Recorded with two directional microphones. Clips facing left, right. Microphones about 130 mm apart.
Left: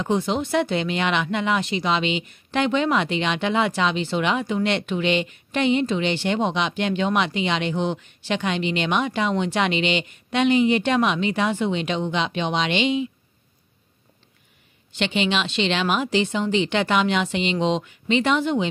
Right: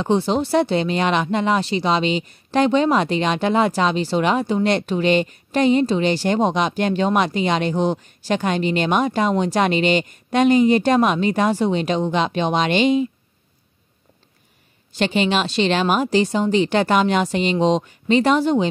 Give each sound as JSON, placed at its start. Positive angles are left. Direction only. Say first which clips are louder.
{"t": 0.0, "sound": "speech", "louder": "right 4 dB", "side_deg": -30}
{"t": 14.9, "sound": "speech", "louder": "right 4 dB", "side_deg": -40}